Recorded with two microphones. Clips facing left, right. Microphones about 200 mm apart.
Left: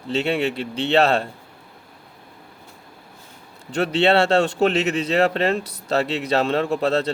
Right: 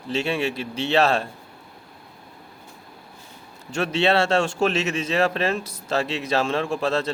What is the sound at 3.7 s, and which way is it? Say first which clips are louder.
A man's voice: left 3 dB; 35° left (ahead or behind).